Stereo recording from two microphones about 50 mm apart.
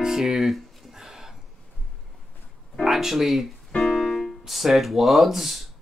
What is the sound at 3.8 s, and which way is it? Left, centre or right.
Music, centre.